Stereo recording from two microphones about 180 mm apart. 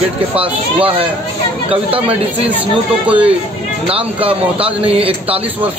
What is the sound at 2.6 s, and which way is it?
Speech, 10° right (ahead or behind).